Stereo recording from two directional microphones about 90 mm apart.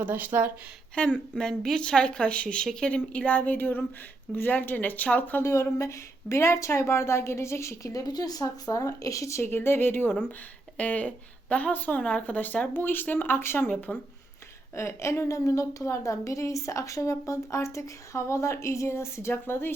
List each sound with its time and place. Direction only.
0.0 s speech: 20° right (ahead or behind)
0.9 s a woman's voice: 10° left (ahead or behind)
5.4 s a woman's voice: 30° left (ahead or behind)
14.8 s a woman's voice: 30° left (ahead or behind)